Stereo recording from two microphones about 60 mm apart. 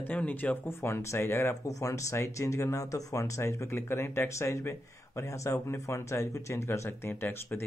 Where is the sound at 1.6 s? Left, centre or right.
Left.